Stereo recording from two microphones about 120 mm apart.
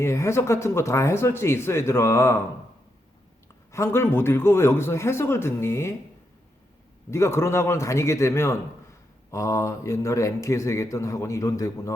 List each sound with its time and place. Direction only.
0.0 s a man's voice: 25° left (ahead or behind)
3.7 s a man's voice: 20° left (ahead or behind)
7.1 s a man's voice: 20° left (ahead or behind)